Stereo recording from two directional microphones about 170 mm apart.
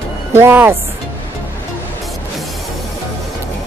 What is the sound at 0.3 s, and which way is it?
Speech, 15° right (ahead or behind).